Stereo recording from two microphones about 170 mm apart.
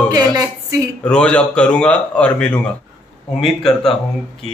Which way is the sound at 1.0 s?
5° left (ahead or behind).